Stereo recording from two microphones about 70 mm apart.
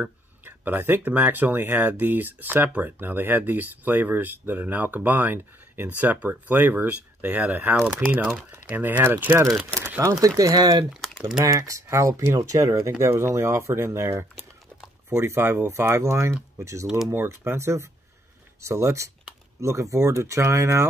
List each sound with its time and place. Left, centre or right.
0.5 s speech: right
10.2 s speech: right
10.9 s speech: centre
11.4 s speech: right
13.0 s speech: right
17.1 s speech: right